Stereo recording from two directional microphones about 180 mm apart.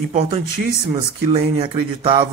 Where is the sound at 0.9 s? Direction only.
30° right (ahead or behind).